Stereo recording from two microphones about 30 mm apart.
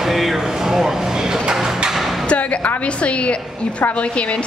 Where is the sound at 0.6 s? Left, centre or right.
Centre.